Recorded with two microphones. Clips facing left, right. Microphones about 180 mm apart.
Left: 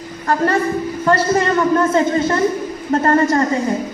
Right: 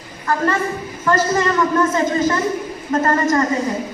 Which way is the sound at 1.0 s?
30° left (ahead or behind).